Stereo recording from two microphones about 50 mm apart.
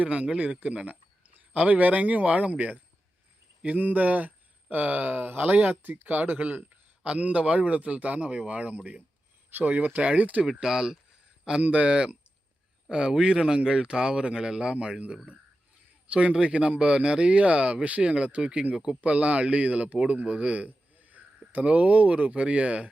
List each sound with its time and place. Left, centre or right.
0.0 s speech: right
10.6 s speech: centre
20.2 s a sound: right
21.6 s speech: right